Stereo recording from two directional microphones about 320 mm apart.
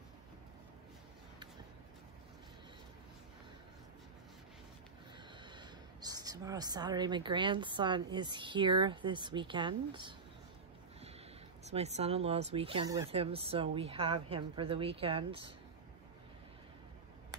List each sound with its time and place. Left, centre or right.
5.4 s speech: centre
11.6 s speech: centre